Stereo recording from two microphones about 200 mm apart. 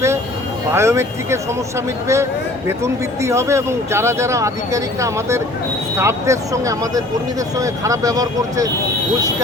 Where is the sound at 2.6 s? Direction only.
15° right (ahead or behind).